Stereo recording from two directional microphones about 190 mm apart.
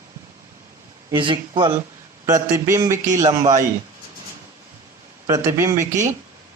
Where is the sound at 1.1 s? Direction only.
25° right (ahead or behind).